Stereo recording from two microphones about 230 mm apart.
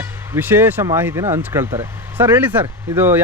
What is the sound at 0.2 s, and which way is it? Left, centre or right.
Speech, centre.